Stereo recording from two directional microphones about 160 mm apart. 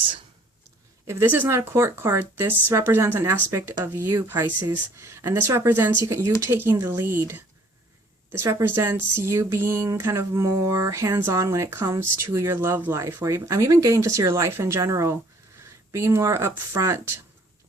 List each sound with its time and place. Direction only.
1.0 s speech: 15° right (ahead or behind)